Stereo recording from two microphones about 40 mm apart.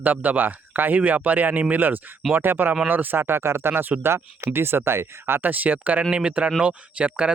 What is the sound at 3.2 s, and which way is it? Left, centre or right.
Speech, right.